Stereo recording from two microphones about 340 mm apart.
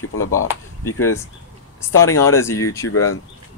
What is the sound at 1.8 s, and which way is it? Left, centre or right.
Speech, centre.